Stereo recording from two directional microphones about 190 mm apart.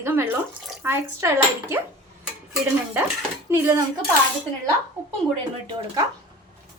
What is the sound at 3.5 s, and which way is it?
Speech, 15° right (ahead or behind).